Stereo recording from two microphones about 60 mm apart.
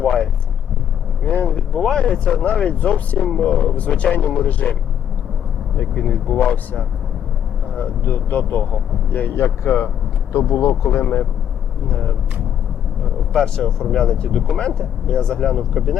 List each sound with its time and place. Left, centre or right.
0.0 s vehicle: centre
1.2 s vehicle: left
1.7 s speech: centre; by 4.8 s left
5.9 s speech: left
13.3 s speech: centre
15.5 s speech: centre